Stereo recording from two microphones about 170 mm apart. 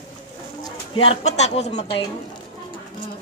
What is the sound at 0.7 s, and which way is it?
Speech, 35° left (ahead or behind).